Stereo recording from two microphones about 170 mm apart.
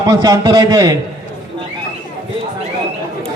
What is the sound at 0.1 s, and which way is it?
Speech, 20° right (ahead or behind).